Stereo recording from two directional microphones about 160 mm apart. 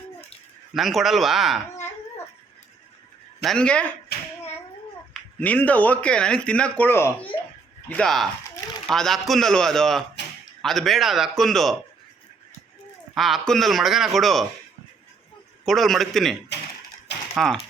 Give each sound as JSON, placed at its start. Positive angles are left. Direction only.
{"t": 0.7, "sound": "a man's voice", "side_deg": 0}
{"t": 3.4, "sound": "speech", "side_deg": 5}
{"t": 4.1, "sound": "a sound", "side_deg": 80}
{"t": 5.4, "sound": "a man's voice", "side_deg": 10}
{"t": 13.1, "sound": "a man's voice", "side_deg": 0}
{"t": 15.6, "sound": "a man's voice", "side_deg": 0}